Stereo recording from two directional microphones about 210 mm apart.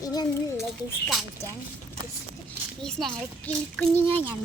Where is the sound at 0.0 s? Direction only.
15° left (ahead or behind).